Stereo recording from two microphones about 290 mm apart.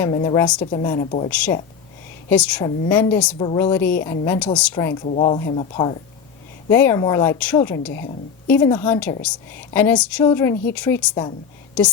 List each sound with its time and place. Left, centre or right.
0.0 s a woman's voice: centre
1.3 s a woman's voice: centre
3.3 s a woman's voice: centre
5.0 s speech: left
6.7 s a woman's voice: centre
11.8 s a woman's voice: centre